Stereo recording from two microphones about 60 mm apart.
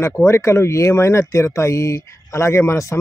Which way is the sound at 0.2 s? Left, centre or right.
Left.